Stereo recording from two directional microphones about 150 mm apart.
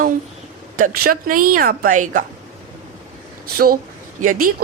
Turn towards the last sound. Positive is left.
turn(degrees=-65)  # may be behind; listen again after turning